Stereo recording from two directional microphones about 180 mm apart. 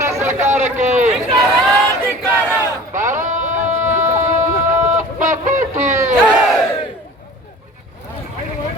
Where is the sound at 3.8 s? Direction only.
15° right (ahead or behind).